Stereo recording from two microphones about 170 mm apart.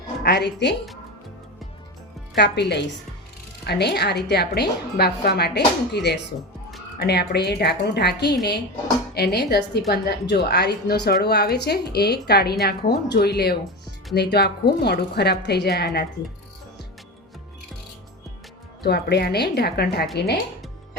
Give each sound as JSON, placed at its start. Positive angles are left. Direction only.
{"t": 0.2, "sound": "speech", "side_deg": 75}
{"t": 2.3, "sound": "a woman's voice", "side_deg": 75}
{"t": 18.8, "sound": "a woman's voice", "side_deg": 75}